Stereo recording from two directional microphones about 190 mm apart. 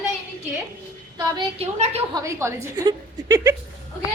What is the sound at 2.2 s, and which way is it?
A woman's voice, 15° right (ahead or behind).